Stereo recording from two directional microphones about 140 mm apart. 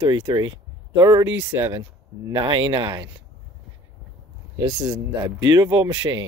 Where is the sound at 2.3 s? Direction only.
35° right (ahead or behind).